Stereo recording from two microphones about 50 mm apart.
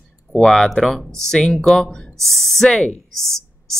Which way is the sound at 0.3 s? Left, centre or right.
Centre.